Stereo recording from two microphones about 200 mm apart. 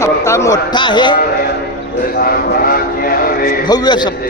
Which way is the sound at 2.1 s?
50° left (ahead or behind).